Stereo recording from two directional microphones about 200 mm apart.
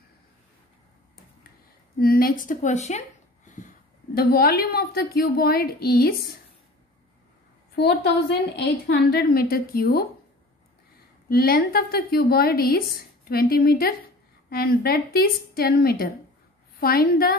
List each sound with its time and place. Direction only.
2.0 s a woman's voice: 45° left (ahead or behind)
4.1 s a woman's voice: 50° left (ahead or behind)
7.7 s a woman's voice: 55° left (ahead or behind)
11.2 s a woman's voice: 50° left (ahead or behind)